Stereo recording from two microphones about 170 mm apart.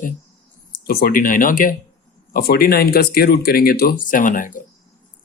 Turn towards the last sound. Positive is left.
turn(degrees=50)  # may be behind; listen again after turning